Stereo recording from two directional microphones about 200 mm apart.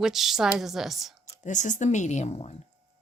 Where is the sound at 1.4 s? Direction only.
40° left (ahead or behind).